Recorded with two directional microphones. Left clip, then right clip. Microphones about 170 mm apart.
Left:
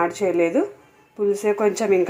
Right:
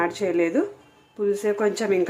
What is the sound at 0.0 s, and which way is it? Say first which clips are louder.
Speech: left 3 dB; centre (ahead or behind).